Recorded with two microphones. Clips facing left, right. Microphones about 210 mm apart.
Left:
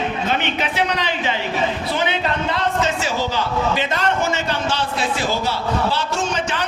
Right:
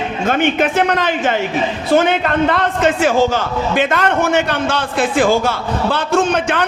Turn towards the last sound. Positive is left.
turn(degrees=-60)  # may be behind; listen again after turning